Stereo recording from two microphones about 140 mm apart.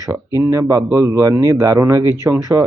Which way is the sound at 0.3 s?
20° right (ahead or behind).